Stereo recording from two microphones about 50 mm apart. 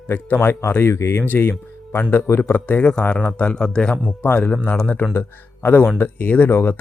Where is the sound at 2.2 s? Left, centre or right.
Left.